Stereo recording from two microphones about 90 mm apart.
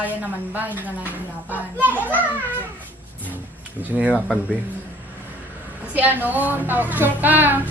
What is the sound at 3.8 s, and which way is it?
Speech, 20° right (ahead or behind).